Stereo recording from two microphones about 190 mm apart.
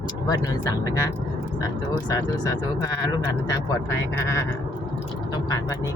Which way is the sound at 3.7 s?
15° left (ahead or behind).